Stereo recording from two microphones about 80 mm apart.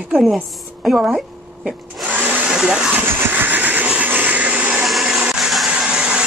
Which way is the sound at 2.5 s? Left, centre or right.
Centre.